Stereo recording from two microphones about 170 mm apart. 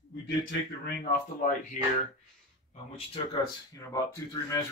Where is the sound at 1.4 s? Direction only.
50° left (ahead or behind).